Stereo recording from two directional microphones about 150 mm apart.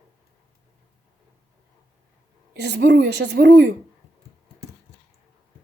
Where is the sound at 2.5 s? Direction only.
90° right.